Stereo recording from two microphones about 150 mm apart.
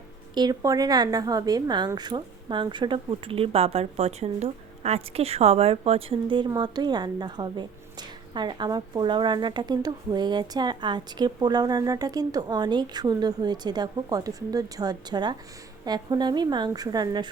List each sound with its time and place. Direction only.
0.3 s speech: 25° right (ahead or behind)